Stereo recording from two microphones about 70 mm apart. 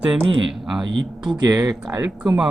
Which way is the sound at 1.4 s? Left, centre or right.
Right.